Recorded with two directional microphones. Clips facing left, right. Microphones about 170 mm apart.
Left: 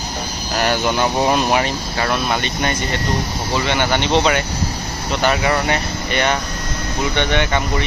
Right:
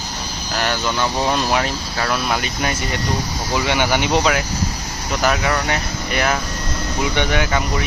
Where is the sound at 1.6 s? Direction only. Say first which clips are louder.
Left 2 dB; centre (ahead or behind).